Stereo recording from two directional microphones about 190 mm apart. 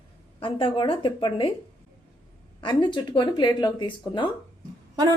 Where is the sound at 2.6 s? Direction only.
25° left (ahead or behind).